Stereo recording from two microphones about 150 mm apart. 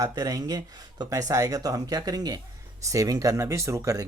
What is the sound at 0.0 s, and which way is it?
Speech, 25° right (ahead or behind).